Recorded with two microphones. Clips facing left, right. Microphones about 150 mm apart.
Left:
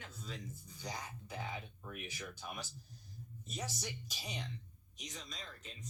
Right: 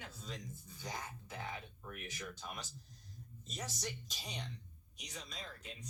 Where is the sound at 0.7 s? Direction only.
15° left (ahead or behind).